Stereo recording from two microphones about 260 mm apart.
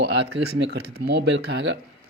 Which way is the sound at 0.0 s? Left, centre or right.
Right.